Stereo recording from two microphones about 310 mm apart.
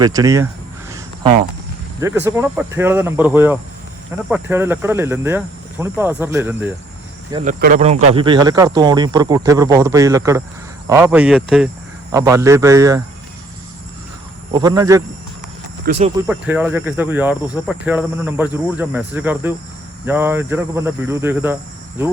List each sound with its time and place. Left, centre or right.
0.0 s speech: centre
0.9 s a sound: centre
2.0 s speech: centre
7.4 s speech: right
14.5 s speech: centre
16.2 s speech: centre